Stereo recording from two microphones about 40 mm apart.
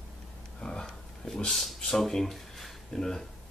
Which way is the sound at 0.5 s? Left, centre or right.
Centre.